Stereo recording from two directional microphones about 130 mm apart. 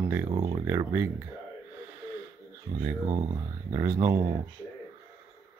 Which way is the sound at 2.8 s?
20° right (ahead or behind).